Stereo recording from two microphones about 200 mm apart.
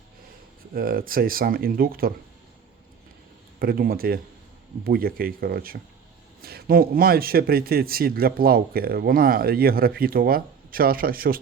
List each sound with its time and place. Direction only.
0.7 s speech: 45° right (ahead or behind)
3.6 s speech: 50° right (ahead or behind)